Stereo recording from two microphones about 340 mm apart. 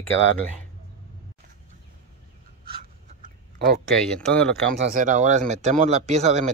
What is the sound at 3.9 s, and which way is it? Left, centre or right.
Speech, centre.